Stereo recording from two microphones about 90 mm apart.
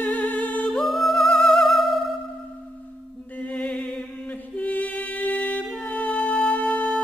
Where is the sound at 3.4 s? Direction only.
15° left (ahead or behind).